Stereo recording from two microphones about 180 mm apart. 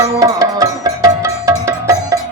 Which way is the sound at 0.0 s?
20° right (ahead or behind).